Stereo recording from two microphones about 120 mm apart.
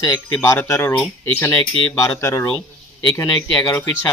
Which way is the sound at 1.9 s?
25° left (ahead or behind).